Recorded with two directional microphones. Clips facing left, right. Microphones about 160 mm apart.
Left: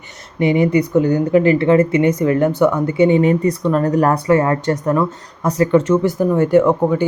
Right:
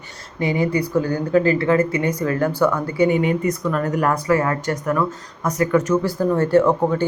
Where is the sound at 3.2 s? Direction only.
35° left (ahead or behind).